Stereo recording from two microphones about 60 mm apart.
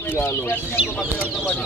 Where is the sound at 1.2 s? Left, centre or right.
Left.